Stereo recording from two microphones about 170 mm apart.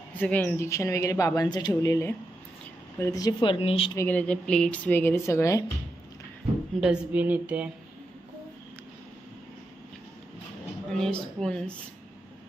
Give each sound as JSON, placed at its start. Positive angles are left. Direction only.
{"t": 0.1, "sound": "speech", "side_deg": 10}
{"t": 4.0, "sound": "speech", "side_deg": 10}
{"t": 6.8, "sound": "a woman's voice", "side_deg": -5}
{"t": 10.9, "sound": "speech", "side_deg": 5}